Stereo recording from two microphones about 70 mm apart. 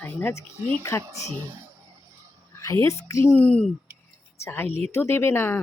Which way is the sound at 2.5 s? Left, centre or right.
Left.